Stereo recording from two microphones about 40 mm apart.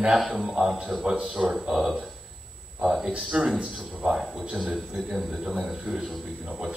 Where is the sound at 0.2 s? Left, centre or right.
Centre.